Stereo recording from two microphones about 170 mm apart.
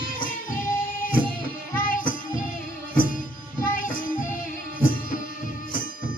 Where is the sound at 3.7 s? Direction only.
55° left (ahead or behind).